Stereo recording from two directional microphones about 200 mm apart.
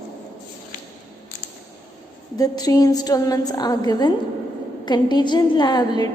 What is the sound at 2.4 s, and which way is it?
A woman's voice, 20° left (ahead or behind).